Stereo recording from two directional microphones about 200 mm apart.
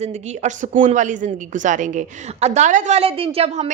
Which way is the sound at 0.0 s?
35° right (ahead or behind).